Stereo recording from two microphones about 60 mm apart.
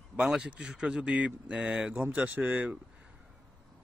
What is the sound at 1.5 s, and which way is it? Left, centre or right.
A man's voice, centre.